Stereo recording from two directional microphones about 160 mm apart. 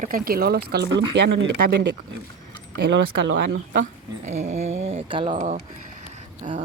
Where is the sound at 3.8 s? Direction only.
45° right (ahead or behind).